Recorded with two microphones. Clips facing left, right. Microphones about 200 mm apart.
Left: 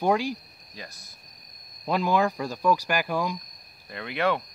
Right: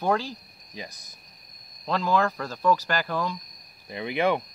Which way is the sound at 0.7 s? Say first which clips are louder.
Right 3 dB; 15° right (ahead or behind).